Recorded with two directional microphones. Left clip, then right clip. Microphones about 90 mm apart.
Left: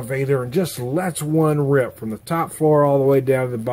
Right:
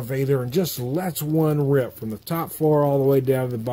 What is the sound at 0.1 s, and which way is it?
Speech, 40° right (ahead or behind).